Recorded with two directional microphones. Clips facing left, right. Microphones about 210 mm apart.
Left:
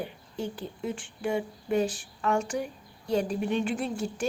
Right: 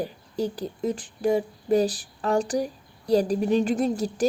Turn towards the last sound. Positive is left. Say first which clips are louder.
# right 7 dB
turn(degrees=-40)  # may be behind; listen again after turning